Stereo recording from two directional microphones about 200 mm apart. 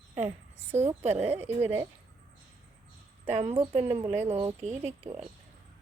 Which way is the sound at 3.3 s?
35° right (ahead or behind).